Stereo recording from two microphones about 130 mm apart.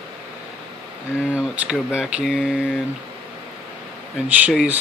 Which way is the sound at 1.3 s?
10° right (ahead or behind).